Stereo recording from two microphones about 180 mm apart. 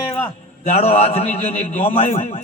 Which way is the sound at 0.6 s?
35° left (ahead or behind).